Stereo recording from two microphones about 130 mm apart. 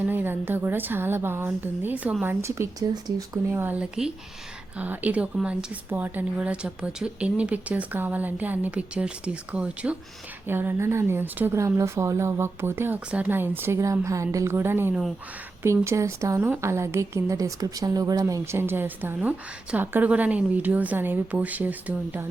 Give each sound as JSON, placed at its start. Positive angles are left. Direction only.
{"t": 0.0, "sound": "speech", "side_deg": -15}
{"t": 3.5, "sound": "speech", "side_deg": -15}
{"t": 18.5, "sound": "speech", "side_deg": -15}